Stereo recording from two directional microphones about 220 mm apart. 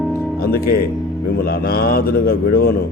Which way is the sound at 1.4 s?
45° left (ahead or behind).